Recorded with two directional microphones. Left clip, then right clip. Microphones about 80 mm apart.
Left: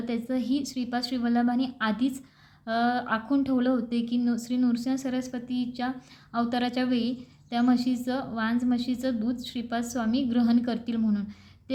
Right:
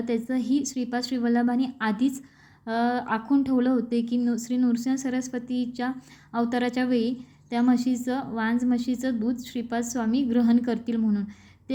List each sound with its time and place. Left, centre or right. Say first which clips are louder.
0.0 s a woman's voice: right 3 dB; right
11.0 s speech: right 2 dB; right